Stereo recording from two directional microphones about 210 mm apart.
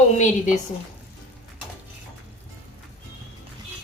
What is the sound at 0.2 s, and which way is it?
Speech, 35° left (ahead or behind).